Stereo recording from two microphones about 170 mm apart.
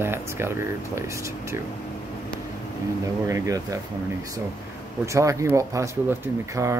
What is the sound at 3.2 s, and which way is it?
Speech, 20° right (ahead or behind).